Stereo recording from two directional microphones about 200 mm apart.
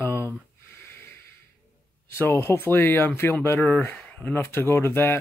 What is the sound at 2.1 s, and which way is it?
Speech, 10° left (ahead or behind).